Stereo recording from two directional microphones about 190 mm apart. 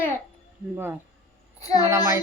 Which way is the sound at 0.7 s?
10° right (ahead or behind).